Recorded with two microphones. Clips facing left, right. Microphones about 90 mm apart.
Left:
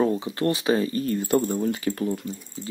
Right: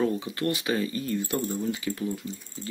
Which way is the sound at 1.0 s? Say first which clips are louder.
Left 6 dB; 45° left (ahead or behind).